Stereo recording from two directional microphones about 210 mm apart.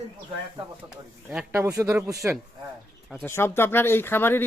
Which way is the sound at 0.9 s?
5° right (ahead or behind).